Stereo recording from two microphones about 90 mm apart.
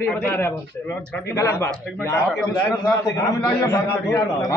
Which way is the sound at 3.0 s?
40° left (ahead or behind).